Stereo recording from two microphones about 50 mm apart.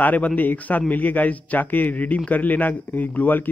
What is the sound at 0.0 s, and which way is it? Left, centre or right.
A man's voice, left.